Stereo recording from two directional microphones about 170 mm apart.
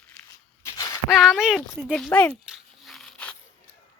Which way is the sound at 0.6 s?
20° left (ahead or behind).